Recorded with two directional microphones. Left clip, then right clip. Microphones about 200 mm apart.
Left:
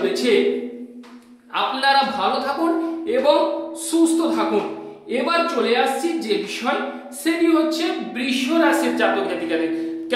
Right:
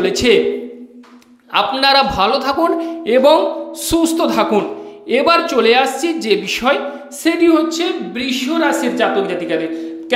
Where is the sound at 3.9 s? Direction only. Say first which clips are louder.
Right 4 dB; 45° right (ahead or behind).